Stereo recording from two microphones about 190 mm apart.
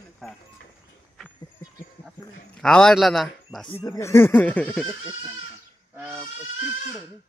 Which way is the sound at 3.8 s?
15° left (ahead or behind).